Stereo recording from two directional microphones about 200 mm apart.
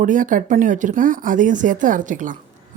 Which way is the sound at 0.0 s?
40° right (ahead or behind).